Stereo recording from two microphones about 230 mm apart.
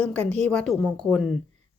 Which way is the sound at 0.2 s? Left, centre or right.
Right.